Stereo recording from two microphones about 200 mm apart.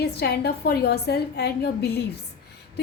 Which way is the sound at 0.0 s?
55° left (ahead or behind).